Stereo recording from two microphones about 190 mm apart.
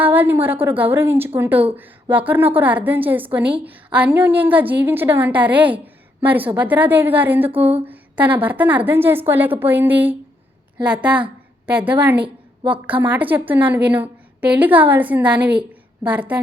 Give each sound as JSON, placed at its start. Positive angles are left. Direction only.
{"t": 0.0, "sound": "a woman's voice", "side_deg": -10}
{"t": 7.5, "sound": "a sound", "side_deg": -30}
{"t": 7.9, "sound": "a woman's voice", "side_deg": -10}